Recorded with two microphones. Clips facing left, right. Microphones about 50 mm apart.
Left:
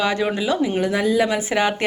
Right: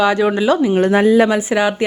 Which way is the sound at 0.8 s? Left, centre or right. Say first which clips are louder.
Right 9 dB; right.